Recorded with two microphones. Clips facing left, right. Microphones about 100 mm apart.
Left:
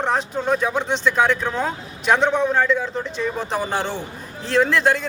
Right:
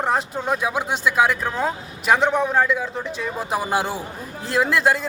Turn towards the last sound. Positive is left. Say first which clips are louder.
# left 1 dB
turn(degrees=-5)  # may be behind; listen again after turning